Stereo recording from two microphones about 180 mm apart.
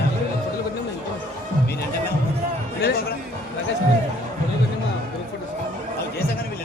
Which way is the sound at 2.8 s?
60° left (ahead or behind).